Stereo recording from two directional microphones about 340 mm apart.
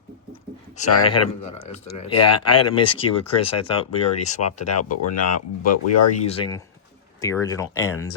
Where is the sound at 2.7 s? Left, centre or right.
Centre.